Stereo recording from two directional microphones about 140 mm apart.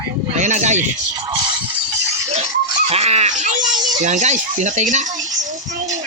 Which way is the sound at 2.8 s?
50° right (ahead or behind).